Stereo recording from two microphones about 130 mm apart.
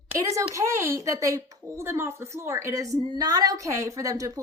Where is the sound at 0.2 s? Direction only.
25° right (ahead or behind).